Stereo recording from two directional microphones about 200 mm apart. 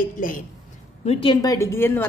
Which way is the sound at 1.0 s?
30° left (ahead or behind).